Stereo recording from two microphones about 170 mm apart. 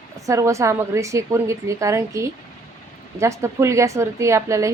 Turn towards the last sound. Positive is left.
turn(degrees=-15)  # may be behind; listen again after turning